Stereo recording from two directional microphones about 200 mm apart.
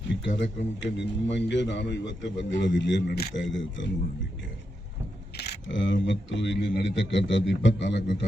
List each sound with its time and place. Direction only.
0.3 s a man's voice: 65° left (ahead or behind)
5.4 s a man's voice: 65° left (ahead or behind)